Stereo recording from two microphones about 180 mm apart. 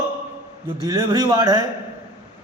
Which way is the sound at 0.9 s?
20° right (ahead or behind).